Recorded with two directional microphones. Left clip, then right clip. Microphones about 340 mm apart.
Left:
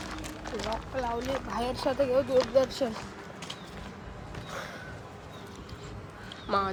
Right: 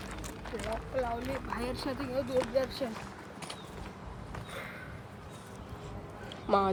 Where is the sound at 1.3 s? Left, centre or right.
Centre.